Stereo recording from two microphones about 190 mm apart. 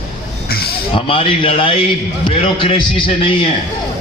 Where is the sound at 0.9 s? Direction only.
30° left (ahead or behind).